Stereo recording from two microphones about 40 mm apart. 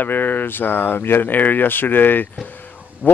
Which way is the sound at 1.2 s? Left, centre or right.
Left.